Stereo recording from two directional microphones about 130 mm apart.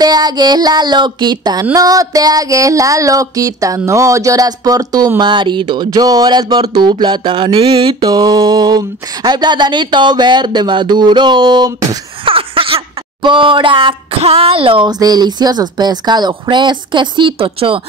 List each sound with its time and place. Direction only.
0.0 s child singing: 30° right (ahead or behind)
12.3 s child singing: 45° right (ahead or behind)